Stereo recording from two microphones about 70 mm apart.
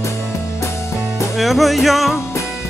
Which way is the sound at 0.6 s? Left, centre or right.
Left.